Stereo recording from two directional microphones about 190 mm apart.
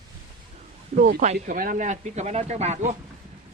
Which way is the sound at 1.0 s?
45° right (ahead or behind).